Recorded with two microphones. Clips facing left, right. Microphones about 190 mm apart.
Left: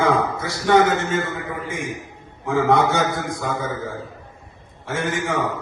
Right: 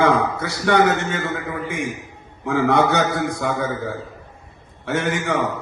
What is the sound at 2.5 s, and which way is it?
A man's voice, 65° right (ahead or behind).